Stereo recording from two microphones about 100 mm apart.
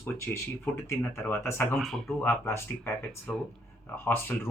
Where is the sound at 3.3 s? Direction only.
5° left (ahead or behind).